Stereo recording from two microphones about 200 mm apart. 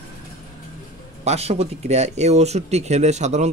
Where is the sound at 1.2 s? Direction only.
35° right (ahead or behind).